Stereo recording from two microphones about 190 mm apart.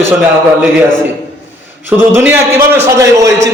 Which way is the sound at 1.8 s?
10° right (ahead or behind).